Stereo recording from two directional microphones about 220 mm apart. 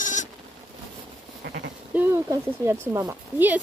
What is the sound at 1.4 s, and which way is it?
Sheep, 50° right (ahead or behind).